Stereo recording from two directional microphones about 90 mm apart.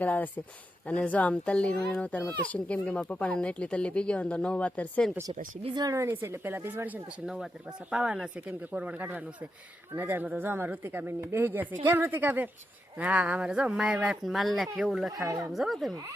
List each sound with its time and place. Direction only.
0.0 s speech: 20° left (ahead or behind)
5.7 s a woman's voice: 40° right (ahead or behind); by 7.2 s 20° right (ahead or behind)
7.3 s speech: 5° right (ahead or behind)
15.3 s a woman's voice: 35° right (ahead or behind)
15.5 s speech: centre (ahead or behind)